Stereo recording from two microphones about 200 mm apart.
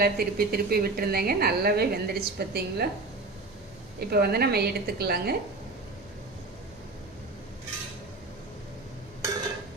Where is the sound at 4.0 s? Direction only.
50° right (ahead or behind).